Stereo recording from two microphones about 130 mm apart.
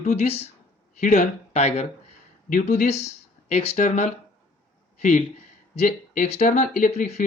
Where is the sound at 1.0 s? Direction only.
70° left (ahead or behind).